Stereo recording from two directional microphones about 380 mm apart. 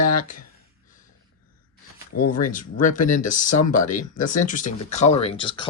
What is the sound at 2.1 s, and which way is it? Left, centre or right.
Speech, left.